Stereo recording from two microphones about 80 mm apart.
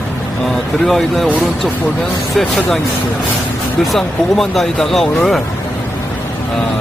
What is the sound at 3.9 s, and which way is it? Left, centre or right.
Speech, centre.